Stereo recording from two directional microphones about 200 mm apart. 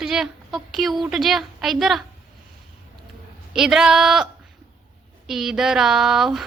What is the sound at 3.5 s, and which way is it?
Speech, centre (ahead or behind).